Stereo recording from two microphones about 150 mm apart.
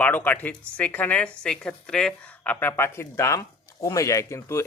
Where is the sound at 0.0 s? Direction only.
10° left (ahead or behind).